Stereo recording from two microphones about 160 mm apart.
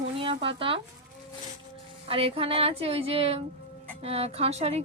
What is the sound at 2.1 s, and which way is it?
A woman's voice, 35° right (ahead or behind).